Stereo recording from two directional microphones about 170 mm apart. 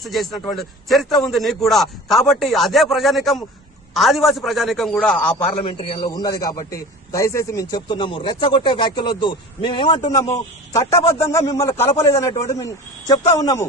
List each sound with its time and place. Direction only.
0.0 s a man's voice: centre (ahead or behind)
5.3 s a man's voice: 30° left (ahead or behind)